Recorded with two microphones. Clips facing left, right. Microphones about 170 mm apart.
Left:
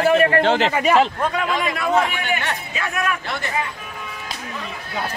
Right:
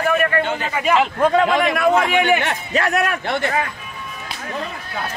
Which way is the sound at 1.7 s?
60° right (ahead or behind).